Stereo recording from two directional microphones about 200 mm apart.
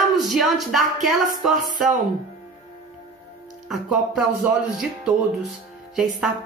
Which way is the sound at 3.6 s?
Centre (ahead or behind).